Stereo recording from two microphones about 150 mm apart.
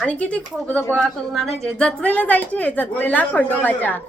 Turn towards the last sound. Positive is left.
turn(degrees=10)  # may be behind; listen again after turning